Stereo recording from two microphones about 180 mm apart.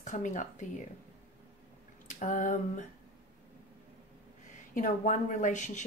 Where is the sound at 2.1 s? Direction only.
45° left (ahead or behind).